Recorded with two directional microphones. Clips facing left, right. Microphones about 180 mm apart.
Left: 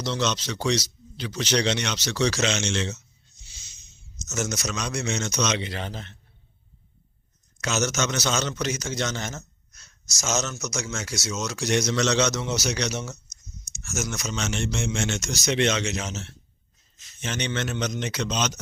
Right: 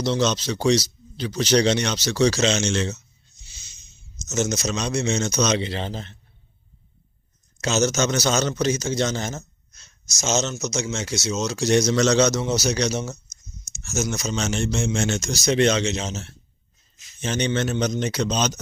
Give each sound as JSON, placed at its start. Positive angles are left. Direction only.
{"t": 0.0, "sound": "a man's voice", "side_deg": -35}
{"t": 4.3, "sound": "a man's voice", "side_deg": -25}
{"t": 7.6, "sound": "a man's voice", "side_deg": -30}